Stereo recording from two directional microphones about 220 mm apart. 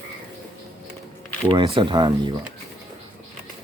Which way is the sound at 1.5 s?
20° right (ahead or behind).